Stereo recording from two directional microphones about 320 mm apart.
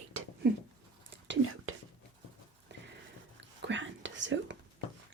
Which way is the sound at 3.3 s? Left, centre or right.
Right.